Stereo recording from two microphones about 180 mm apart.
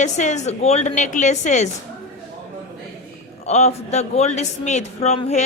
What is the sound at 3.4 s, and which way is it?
A woman's voice, 35° left (ahead or behind).